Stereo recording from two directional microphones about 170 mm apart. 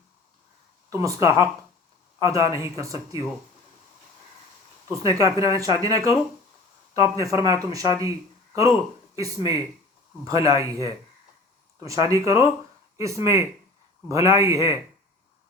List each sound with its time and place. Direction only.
0.9 s speech: 20° right (ahead or behind)
4.9 s speech: 20° right (ahead or behind)
9.1 s speech: 20° right (ahead or behind)